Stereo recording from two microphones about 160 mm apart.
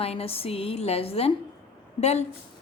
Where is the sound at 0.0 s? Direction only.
40° left (ahead or behind).